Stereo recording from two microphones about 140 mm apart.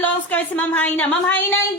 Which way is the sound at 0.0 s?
10° left (ahead or behind).